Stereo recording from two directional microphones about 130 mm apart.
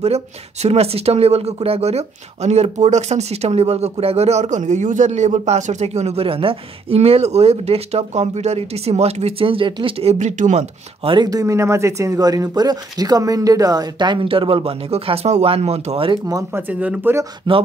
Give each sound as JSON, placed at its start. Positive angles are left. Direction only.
{"t": 0.0, "sound": "a man's voice", "side_deg": -55}
{"t": 10.1, "sound": "a man's voice", "side_deg": -65}
{"t": 11.1, "sound": "speech", "side_deg": -30}
{"t": 16.1, "sound": "speech", "side_deg": -30}
{"t": 16.6, "sound": "speech", "side_deg": -15}